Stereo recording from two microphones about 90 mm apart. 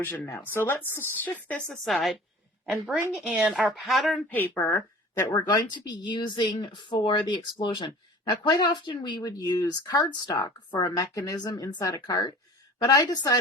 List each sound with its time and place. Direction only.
0.0 s speech: 20° left (ahead or behind)
1.6 s a woman's voice: 5° left (ahead or behind)
3.2 s speech: 15° right (ahead or behind)
3.8 s a woman's voice: centre (ahead or behind)
4.3 s speech: 25° left (ahead or behind)
5.2 s speech: 55° left (ahead or behind)
11.4 s speech: 50° left (ahead or behind)